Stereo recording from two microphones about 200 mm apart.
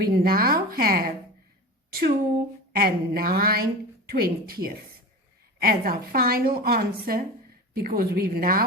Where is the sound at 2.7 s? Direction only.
50° right (ahead or behind).